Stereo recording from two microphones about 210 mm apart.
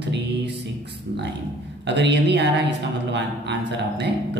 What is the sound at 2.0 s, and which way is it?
Speech, 55° right (ahead or behind).